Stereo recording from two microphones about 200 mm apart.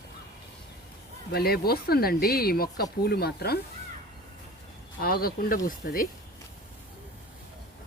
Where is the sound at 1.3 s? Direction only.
50° left (ahead or behind).